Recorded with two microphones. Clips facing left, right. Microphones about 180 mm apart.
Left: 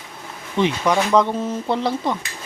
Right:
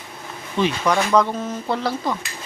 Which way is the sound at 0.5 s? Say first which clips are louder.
Left 1 dB; 20° left (ahead or behind).